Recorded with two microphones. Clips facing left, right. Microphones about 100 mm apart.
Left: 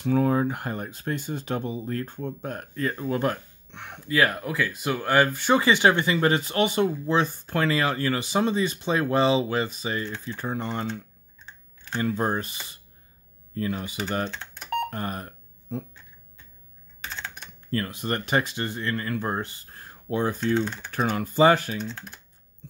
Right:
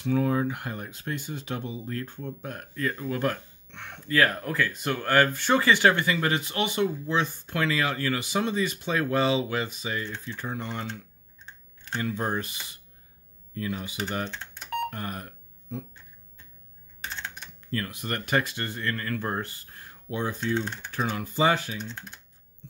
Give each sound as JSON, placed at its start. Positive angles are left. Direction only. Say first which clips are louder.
{"t": 0.0, "sound": "speech", "louder": "left 3 dB", "side_deg": 40}
{"t": 12.0, "sound": "speech", "louder": "left 4 dB", "side_deg": 35}
{"t": 14.3, "sound": "a sound", "louder": "left 1 dB", "side_deg": 90}
{"t": 14.9, "sound": "burping", "louder": "left 3 dB", "side_deg": 35}
{"t": 17.6, "sound": "speech", "louder": "left 4 dB", "side_deg": 35}
{"t": 19.7, "sound": "a sound", "louder": "left 5 dB", "side_deg": 40}
{"t": 20.9, "sound": "speech", "louder": "left 3 dB", "side_deg": 50}